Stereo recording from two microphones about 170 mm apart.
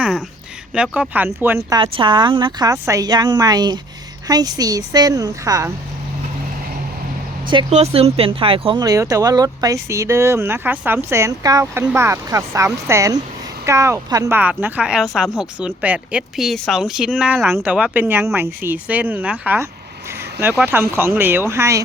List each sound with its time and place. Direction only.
0.7 s speech: 5° right (ahead or behind)
1.8 s speech: 30° right (ahead or behind)
7.7 s speech: 40° right (ahead or behind); by 21.8 s 15° right (ahead or behind)